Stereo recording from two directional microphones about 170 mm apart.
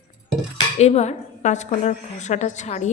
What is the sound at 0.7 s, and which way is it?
A woman's voice, 40° left (ahead or behind).